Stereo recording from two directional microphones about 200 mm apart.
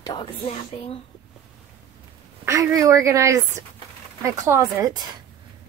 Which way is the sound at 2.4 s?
15° right (ahead or behind).